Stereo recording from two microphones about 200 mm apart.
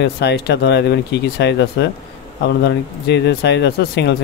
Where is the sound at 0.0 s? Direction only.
55° left (ahead or behind).